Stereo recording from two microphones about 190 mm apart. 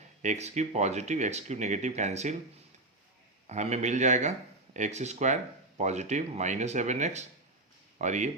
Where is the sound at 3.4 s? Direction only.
35° right (ahead or behind).